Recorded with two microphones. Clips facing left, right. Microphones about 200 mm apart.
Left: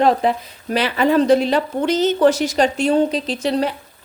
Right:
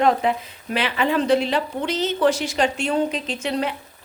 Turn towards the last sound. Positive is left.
turn(degrees=35)  # may be behind; listen again after turning